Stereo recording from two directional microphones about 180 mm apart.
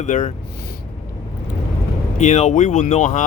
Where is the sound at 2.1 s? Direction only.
40° left (ahead or behind).